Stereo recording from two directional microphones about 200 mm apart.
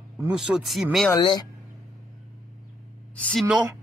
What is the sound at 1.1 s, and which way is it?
Speech, 20° left (ahead or behind).